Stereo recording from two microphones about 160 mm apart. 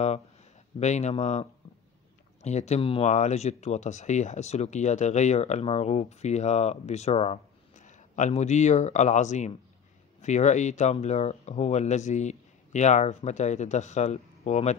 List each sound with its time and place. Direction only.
0.7 s speech: 45° left (ahead or behind)